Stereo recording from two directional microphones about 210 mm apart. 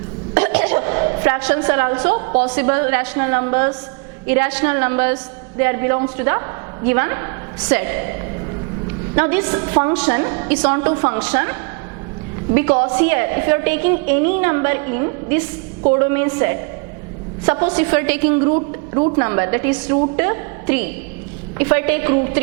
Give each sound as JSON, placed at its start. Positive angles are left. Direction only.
{"t": 0.3, "sound": "a sound", "side_deg": -10}
{"t": 2.4, "sound": "a woman's voice", "side_deg": -10}
{"t": 9.1, "sound": "a woman's voice", "side_deg": -10}
{"t": 12.5, "sound": "a woman's voice", "side_deg": -10}
{"t": 18.5, "sound": "a man's voice", "side_deg": -25}
{"t": 19.2, "sound": "a woman's voice", "side_deg": -10}